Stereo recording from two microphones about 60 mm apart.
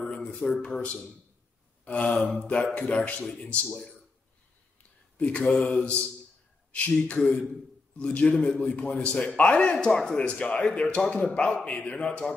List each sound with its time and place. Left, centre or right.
0.3 s a man's voice: centre
2.1 s a man's voice: centre
5.1 s a man's voice: centre
10.1 s a man's voice: left